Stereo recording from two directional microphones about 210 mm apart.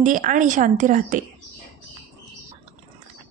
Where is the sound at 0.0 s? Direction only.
40° right (ahead or behind).